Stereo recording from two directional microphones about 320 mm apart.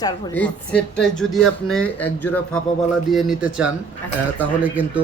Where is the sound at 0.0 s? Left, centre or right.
Centre.